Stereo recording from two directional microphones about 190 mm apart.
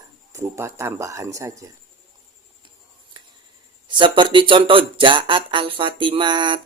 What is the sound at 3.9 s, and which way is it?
A man's voice, 25° right (ahead or behind).